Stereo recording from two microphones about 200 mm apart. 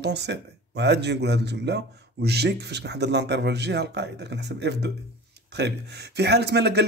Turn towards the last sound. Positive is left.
turn(degrees=-55)  # may be behind; listen again after turning